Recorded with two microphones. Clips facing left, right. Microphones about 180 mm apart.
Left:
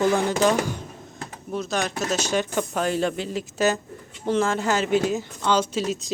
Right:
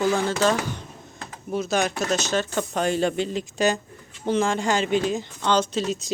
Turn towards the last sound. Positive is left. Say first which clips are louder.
# even
turn(degrees=5)  # may be behind; listen again after turning